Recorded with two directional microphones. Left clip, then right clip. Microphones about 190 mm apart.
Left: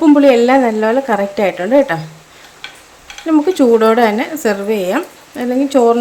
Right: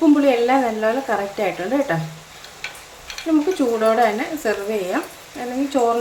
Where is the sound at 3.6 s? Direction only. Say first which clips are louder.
Left 8 dB; 60° left (ahead or behind).